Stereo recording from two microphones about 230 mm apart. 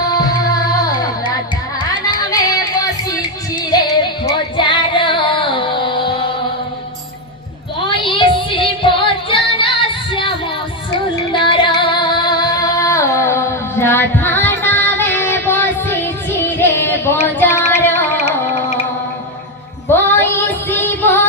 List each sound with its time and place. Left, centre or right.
0.0 s music: centre
2.0 s music: centre
7.9 s child singing: left
11.3 s music: left
16.4 s a sound: centre
17.4 s child singing: centre
19.9 s female singing: centre